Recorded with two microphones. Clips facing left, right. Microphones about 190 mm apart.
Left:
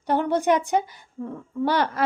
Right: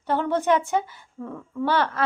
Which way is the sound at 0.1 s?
15° left (ahead or behind).